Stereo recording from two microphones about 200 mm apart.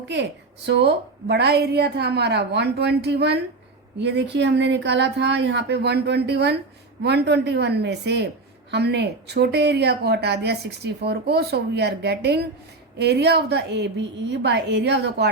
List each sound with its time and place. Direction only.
0.1 s a woman's voice: 60° right (ahead or behind)